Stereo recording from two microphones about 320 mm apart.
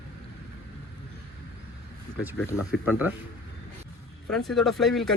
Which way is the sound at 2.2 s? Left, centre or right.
Centre.